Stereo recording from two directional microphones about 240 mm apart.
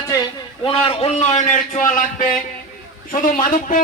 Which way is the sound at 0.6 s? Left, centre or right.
Left.